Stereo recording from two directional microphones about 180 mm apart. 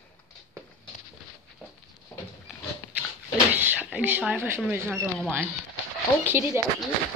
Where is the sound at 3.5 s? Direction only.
10° right (ahead or behind).